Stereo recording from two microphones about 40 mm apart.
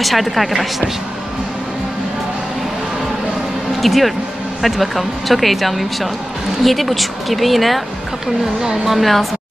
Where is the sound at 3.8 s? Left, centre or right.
Centre.